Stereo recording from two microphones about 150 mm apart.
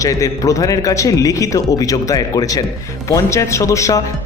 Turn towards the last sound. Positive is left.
turn(degrees=20)  # may be behind; listen again after turning